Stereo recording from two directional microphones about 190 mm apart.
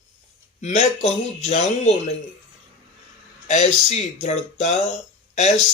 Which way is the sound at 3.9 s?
35° left (ahead or behind).